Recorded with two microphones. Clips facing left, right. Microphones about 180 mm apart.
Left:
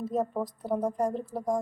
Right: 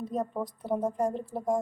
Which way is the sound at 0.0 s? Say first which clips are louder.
Left 2 dB; 5° left (ahead or behind).